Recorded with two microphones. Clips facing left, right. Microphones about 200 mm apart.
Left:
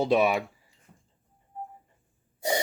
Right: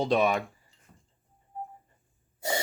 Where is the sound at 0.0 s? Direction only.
10° left (ahead or behind).